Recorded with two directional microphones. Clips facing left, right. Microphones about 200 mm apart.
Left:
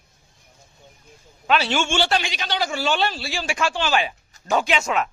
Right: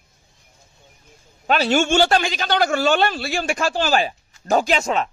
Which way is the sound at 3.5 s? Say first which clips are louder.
Right 1 dB; 40° right (ahead or behind).